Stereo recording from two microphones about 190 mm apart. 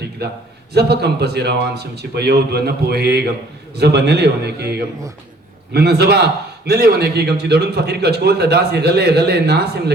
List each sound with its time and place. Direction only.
0.7 s a man's voice: 60° right (ahead or behind)